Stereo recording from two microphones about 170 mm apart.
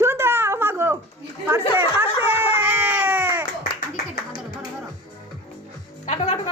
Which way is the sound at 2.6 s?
10° right (ahead or behind).